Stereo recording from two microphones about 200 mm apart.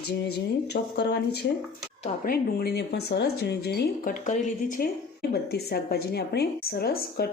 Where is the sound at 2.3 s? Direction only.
55° left (ahead or behind).